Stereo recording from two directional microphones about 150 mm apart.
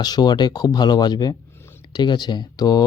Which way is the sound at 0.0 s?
30° left (ahead or behind).